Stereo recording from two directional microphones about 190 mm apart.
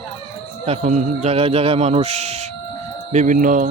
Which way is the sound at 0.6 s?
35° right (ahead or behind).